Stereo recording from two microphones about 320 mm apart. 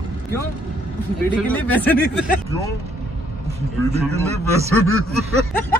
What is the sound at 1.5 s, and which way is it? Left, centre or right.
Speech, centre.